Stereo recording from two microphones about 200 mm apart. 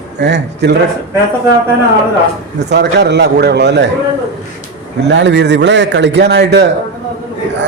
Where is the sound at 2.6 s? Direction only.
60° right (ahead or behind).